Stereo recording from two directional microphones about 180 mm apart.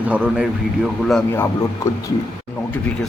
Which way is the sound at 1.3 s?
15° left (ahead or behind).